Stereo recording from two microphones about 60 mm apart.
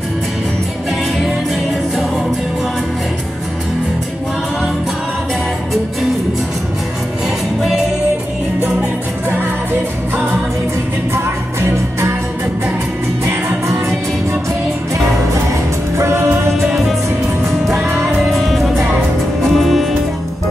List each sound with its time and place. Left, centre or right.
11.1 s music: right
17.9 s music: centre